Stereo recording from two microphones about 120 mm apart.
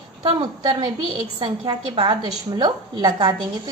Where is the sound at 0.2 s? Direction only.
50° right (ahead or behind).